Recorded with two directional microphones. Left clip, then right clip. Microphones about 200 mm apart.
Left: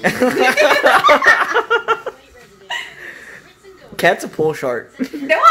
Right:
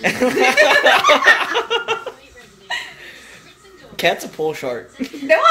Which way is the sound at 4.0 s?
35° left (ahead or behind).